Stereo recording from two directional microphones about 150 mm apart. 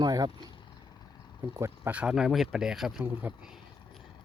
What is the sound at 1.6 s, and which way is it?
Speech, 10° right (ahead or behind).